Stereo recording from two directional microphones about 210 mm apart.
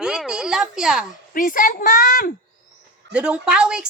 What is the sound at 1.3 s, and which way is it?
A woman's voice, 40° left (ahead or behind).